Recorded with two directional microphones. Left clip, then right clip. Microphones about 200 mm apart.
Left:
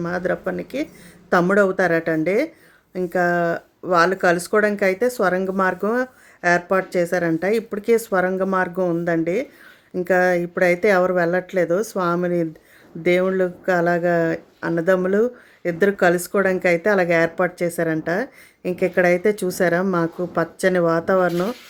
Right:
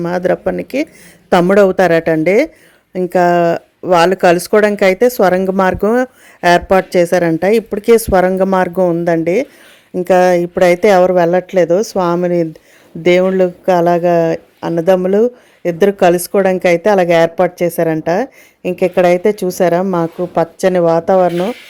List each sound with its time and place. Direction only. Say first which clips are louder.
0.0 s speech: right 9 dB; 35° right (ahead or behind); by 21.5 s 15° right (ahead or behind)